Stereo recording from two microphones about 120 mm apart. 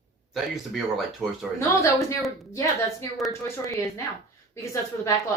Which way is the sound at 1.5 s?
25° left (ahead or behind).